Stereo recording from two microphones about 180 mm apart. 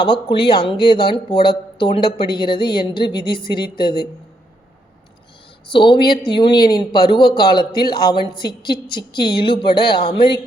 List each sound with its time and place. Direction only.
0.0 s speech: 25° left (ahead or behind)
5.7 s speech: 25° left (ahead or behind)